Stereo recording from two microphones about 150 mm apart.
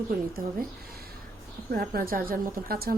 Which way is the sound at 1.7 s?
80° right.